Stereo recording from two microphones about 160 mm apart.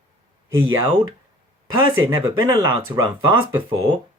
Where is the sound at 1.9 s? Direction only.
20° right (ahead or behind).